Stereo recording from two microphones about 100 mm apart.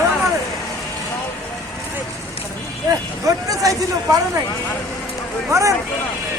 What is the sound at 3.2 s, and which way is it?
Speech, 35° right (ahead or behind).